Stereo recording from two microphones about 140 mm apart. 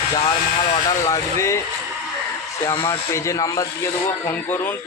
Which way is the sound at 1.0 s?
20° left (ahead or behind).